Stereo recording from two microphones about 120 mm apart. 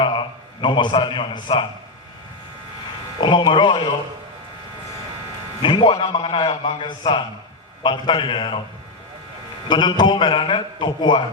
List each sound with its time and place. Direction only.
0.0 s a man's voice: 40° left (ahead or behind)
3.2 s a man's voice: 40° left (ahead or behind)
5.6 s a man's voice: 45° left (ahead or behind)
9.6 s a man's voice: 40° left (ahead or behind)